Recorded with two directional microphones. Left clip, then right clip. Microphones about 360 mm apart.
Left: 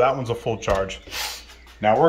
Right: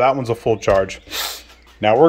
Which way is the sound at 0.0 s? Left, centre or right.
Centre.